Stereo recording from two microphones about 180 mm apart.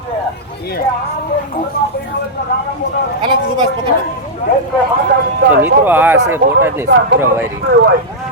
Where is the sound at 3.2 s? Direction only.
25° right (ahead or behind).